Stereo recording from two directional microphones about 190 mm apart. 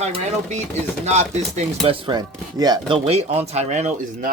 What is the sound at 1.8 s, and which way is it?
Speech, 25° right (ahead or behind).